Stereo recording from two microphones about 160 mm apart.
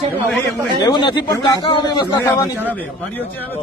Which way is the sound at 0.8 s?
30° left (ahead or behind).